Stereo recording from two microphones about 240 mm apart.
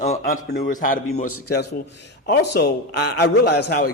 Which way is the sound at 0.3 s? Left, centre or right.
Left.